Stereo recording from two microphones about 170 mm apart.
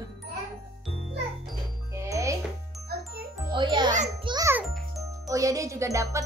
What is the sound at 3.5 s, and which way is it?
Music, 30° right (ahead or behind).